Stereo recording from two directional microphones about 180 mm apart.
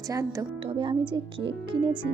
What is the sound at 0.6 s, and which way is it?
Speech, 30° right (ahead or behind).